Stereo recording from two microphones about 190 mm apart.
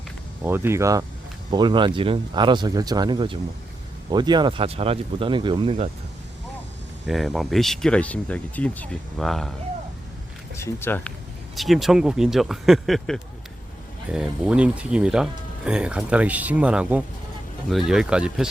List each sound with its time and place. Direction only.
0.4 s speech: 10° right (ahead or behind); by 5.9 s 30° right (ahead or behind)
7.0 s speech: centre (ahead or behind)
10.6 s speech: 15° left (ahead or behind)
11.5 s speech: centre (ahead or behind)